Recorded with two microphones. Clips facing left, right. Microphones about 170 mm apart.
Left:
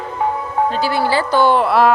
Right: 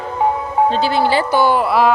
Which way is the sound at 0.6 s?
25° right (ahead or behind).